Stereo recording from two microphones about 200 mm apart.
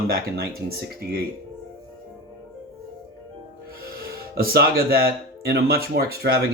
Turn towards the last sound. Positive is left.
turn(degrees=-50)  # may be behind; listen again after turning